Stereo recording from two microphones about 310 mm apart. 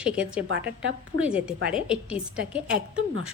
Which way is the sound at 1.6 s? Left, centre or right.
Right.